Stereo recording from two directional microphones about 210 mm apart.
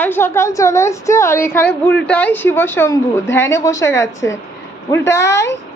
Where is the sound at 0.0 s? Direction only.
10° left (ahead or behind).